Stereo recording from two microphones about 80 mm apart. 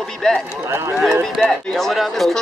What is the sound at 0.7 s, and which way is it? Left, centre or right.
Speech, right.